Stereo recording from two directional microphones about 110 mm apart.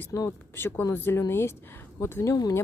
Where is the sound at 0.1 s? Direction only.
25° left (ahead or behind).